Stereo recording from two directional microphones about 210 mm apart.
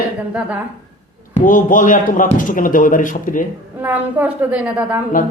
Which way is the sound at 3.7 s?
10° right (ahead or behind).